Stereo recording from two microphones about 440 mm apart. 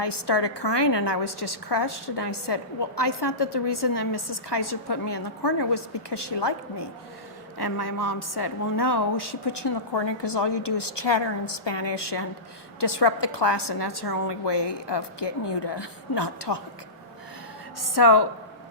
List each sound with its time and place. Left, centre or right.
0.0 s a woman's voice: left
17.7 s a woman's voice: left